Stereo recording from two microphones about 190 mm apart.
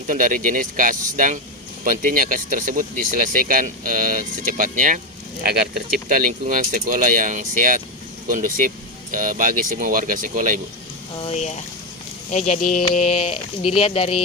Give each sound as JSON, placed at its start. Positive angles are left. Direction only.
{"t": 0.1, "sound": "speech", "side_deg": -45}
{"t": 5.4, "sound": "speech", "side_deg": -55}
{"t": 11.2, "sound": "speech", "side_deg": 35}